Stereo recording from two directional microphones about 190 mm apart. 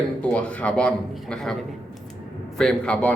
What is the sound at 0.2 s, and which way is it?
A man's voice, 5° left (ahead or behind).